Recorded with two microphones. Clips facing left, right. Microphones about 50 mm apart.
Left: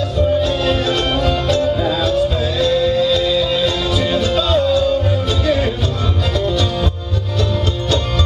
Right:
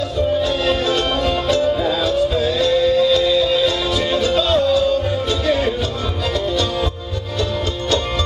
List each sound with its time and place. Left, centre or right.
0.4 s music: centre
6.4 s music: centre